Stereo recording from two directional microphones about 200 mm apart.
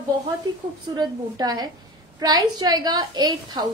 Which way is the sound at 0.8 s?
20° right (ahead or behind).